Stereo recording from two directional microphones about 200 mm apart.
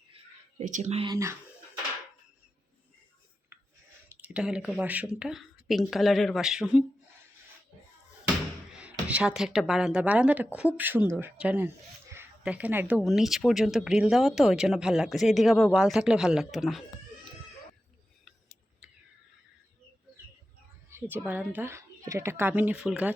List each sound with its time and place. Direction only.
0.6 s speech: 35° right (ahead or behind)
1.1 s a sound: 15° right (ahead or behind)
4.1 s speech: 5° right (ahead or behind)
8.7 s speech: 5° right (ahead or behind)
18.3 s a sound: centre (ahead or behind)
20.9 s speech: 10° right (ahead or behind)